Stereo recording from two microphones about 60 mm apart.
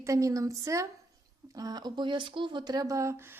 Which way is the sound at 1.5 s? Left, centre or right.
Right.